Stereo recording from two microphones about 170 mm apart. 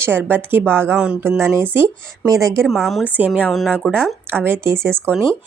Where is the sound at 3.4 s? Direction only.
5° left (ahead or behind).